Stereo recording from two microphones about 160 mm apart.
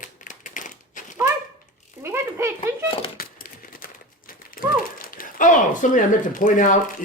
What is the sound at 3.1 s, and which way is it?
Typewriter, 65° left (ahead or behind).